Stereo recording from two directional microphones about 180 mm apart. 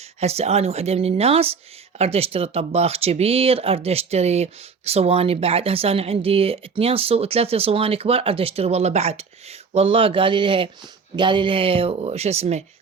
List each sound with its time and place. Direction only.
0.2 s speech: 35° right (ahead or behind)